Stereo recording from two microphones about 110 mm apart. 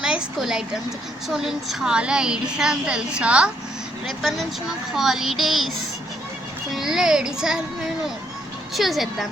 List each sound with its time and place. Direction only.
0.0 s a woman's voice: 5° right (ahead or behind)
6.7 s a child's voice: 5° right (ahead or behind)